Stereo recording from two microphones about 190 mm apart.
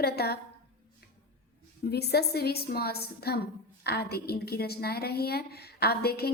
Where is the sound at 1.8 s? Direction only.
55° left (ahead or behind).